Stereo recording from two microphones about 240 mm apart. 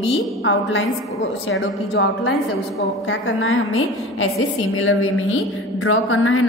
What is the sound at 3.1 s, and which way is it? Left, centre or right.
A woman's voice, left.